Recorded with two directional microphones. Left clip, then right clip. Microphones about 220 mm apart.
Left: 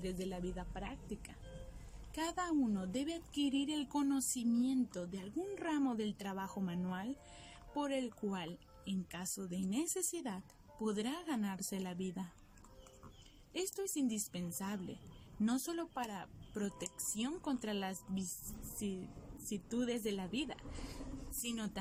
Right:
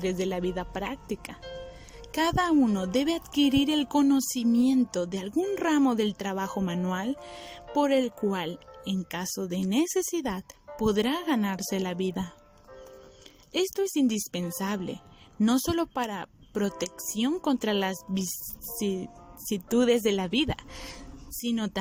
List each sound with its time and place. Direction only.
0.0 s speech: 40° right (ahead or behind)
13.5 s speech: 40° right (ahead or behind)
19.5 s speech: 45° right (ahead or behind)